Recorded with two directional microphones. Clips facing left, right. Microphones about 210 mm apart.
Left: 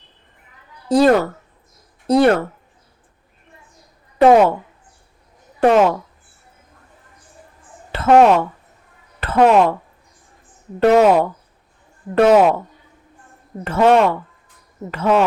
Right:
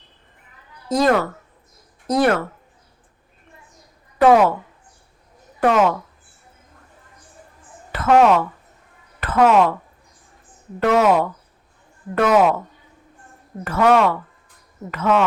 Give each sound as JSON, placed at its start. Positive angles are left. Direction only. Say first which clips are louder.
{"t": 0.9, "sound": "speech", "louder": "left 4 dB", "side_deg": 30}
{"t": 4.2, "sound": "a sound", "louder": "left 2 dB", "side_deg": 25}
{"t": 7.9, "sound": "speech", "louder": "left 3 dB", "side_deg": 30}
{"t": 10.8, "sound": "speech", "louder": "left 4 dB", "side_deg": 30}
{"t": 13.7, "sound": "speech", "louder": "left 2 dB", "side_deg": 25}